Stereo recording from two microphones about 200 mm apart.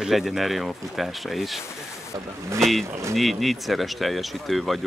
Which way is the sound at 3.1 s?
Centre (ahead or behind).